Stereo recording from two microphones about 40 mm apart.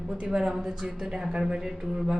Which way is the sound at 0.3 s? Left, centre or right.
Centre.